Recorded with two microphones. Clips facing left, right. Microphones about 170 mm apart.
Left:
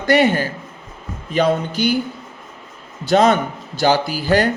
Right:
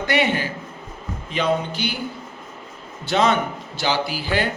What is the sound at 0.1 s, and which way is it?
A man's voice, 40° left (ahead or behind).